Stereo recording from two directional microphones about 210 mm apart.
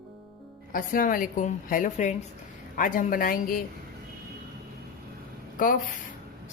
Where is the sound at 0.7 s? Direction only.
40° left (ahead or behind).